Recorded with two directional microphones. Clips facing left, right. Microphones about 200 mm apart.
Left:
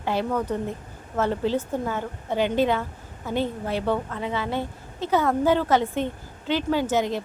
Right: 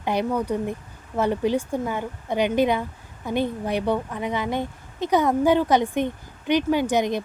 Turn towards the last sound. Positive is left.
turn(degrees=-15)  # may be behind; listen again after turning